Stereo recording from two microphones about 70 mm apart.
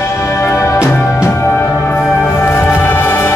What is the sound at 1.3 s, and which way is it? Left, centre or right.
Music, left.